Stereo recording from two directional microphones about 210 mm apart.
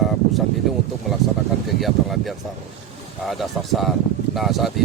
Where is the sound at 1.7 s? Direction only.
Centre (ahead or behind).